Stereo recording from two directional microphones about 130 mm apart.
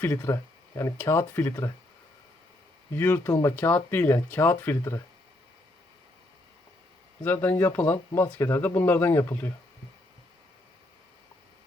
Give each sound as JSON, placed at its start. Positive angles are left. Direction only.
{"t": 0.0, "sound": "speech", "side_deg": 20}
{"t": 2.9, "sound": "speech", "side_deg": 15}
{"t": 7.3, "sound": "speech", "side_deg": 15}